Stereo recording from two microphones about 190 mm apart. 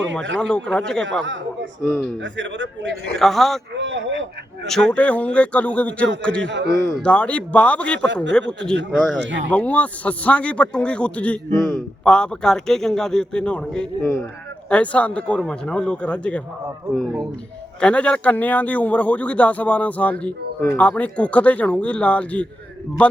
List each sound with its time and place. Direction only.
0.3 s a man's voice: 5° left (ahead or behind)
2.2 s a man's voice: 70° right (ahead or behind)
3.2 s a man's voice: centre (ahead or behind)
3.8 s a sound: 70° right (ahead or behind)
4.6 s a man's voice: 5° left (ahead or behind)
6.5 s a man's voice: 65° right (ahead or behind)
7.0 s a man's voice: 5° left (ahead or behind)
8.0 s a man's voice: 70° right (ahead or behind)
8.3 s a man's voice: 5° left (ahead or behind)
8.7 s a man's voice: 70° right (ahead or behind)
9.5 s a man's voice: 5° left (ahead or behind)